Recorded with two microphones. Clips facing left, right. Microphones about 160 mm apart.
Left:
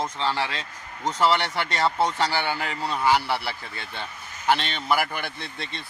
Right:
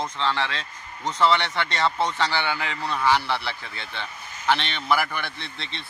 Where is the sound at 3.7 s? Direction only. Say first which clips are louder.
Even; 45° left (ahead or behind).